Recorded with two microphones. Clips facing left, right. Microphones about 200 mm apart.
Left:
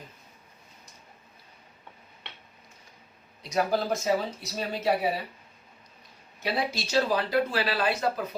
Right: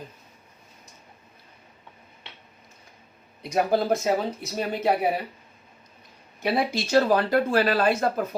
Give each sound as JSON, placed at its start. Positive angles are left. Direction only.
{"t": 3.4, "sound": "speech", "side_deg": -55}
{"t": 6.4, "sound": "speech", "side_deg": -55}